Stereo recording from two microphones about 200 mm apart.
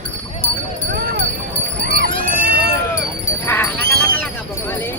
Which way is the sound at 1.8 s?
45° right (ahead or behind).